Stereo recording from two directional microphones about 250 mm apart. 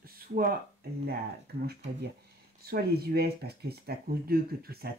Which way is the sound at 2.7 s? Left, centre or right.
Right.